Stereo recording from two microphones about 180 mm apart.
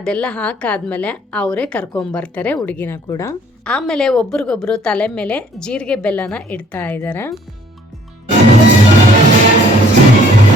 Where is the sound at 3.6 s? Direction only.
5° left (ahead or behind).